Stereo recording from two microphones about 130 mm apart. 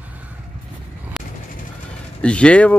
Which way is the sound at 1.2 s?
Centre (ahead or behind).